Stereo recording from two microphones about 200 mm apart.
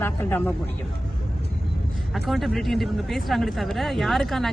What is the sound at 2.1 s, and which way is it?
Speech, centre (ahead or behind).